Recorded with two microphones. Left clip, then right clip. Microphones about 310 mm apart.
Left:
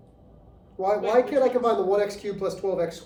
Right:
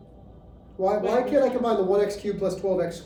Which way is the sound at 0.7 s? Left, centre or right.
Left.